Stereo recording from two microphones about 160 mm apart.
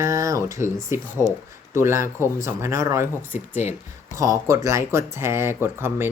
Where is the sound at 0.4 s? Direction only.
20° right (ahead or behind).